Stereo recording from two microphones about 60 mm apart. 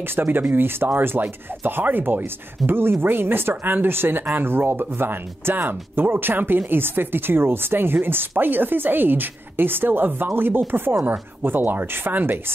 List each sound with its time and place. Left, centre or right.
0.0 s speech: right